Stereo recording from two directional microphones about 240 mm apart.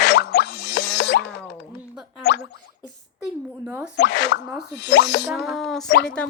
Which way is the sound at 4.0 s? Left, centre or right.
Left.